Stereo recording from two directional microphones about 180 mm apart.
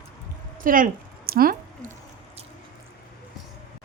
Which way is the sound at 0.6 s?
50° right (ahead or behind).